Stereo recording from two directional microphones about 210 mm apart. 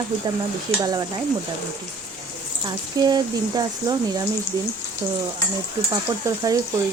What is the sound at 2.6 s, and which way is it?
Speech, 20° right (ahead or behind).